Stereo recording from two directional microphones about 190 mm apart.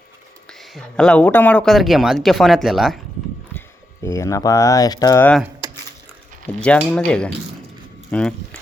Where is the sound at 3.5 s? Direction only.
15° left (ahead or behind).